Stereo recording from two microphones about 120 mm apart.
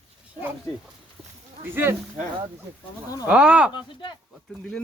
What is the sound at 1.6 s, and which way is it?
Speech, 20° right (ahead or behind).